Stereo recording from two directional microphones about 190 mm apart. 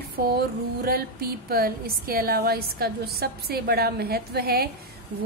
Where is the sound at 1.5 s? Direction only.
50° right (ahead or behind).